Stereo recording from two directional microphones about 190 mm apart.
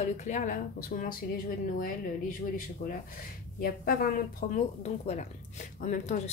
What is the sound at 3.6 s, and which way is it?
Speech, 50° left (ahead or behind).